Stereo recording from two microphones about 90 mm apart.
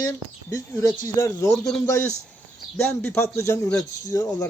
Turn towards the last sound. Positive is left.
turn(degrees=40)  # may be behind; listen again after turning